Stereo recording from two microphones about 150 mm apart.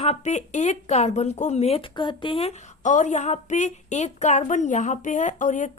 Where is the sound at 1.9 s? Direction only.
30° left (ahead or behind); by 5.7 s 55° left (ahead or behind).